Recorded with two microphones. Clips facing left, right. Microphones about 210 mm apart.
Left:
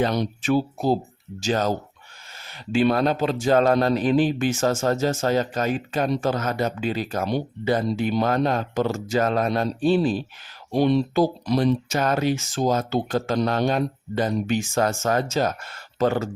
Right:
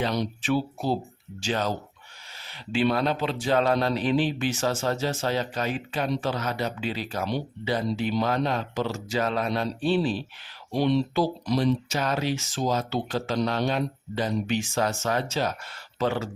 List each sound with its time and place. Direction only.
0.0 s speech: 50° left (ahead or behind)